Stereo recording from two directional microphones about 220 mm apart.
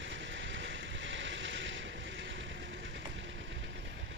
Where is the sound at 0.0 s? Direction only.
55° right (ahead or behind).